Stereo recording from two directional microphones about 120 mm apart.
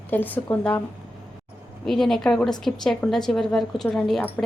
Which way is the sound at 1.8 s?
Centre (ahead or behind).